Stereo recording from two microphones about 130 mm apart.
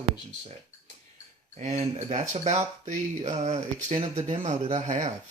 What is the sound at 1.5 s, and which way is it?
Speech, 60° right (ahead or behind).